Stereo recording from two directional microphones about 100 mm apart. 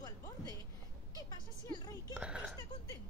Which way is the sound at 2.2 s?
10° right (ahead or behind).